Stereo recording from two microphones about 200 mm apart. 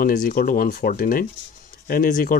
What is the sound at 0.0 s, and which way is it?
Speech, 45° left (ahead or behind).